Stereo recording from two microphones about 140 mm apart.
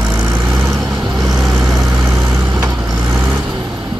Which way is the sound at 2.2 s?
30° right (ahead or behind).